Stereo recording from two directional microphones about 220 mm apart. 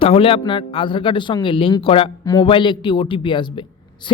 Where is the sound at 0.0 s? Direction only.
25° left (ahead or behind).